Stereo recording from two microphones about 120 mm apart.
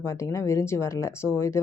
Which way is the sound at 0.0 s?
25° left (ahead or behind).